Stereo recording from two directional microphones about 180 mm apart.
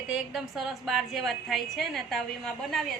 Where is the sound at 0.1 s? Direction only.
Centre (ahead or behind).